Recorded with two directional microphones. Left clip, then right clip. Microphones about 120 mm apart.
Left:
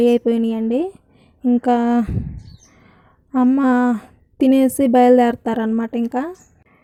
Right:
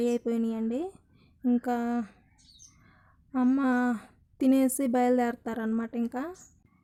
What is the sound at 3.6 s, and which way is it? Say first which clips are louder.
Speech: left 11 dB; 35° left (ahead or behind).